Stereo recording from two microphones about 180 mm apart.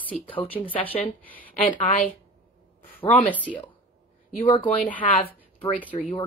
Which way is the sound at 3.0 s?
25° left (ahead or behind).